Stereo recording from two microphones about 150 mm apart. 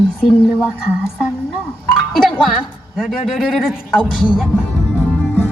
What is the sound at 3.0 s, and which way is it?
Speech, 5° right (ahead or behind).